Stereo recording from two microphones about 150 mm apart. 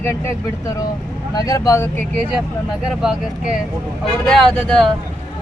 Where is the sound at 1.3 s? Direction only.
25° left (ahead or behind).